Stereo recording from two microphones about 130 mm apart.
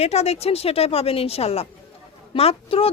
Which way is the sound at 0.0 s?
55° left (ahead or behind).